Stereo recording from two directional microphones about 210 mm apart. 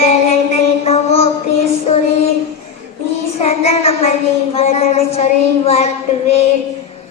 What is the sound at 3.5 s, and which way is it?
Child singing, 30° left (ahead or behind).